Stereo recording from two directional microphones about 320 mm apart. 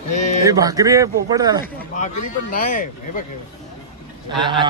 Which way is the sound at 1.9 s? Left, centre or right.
Left.